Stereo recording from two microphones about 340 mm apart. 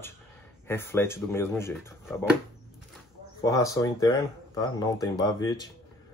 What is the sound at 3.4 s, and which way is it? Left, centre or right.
Speech, centre.